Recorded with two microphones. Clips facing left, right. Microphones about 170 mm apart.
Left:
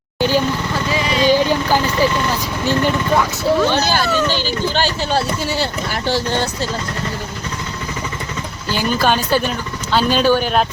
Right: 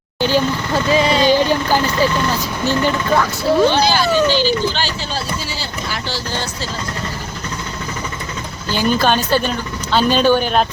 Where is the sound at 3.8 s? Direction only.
50° left (ahead or behind).